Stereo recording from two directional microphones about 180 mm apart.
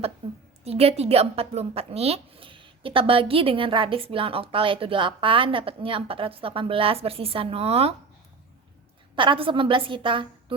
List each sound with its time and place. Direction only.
0.2 s a sound: 30° right (ahead or behind)
0.6 s speech: 35° right (ahead or behind)
9.1 s a woman's voice: 25° right (ahead or behind)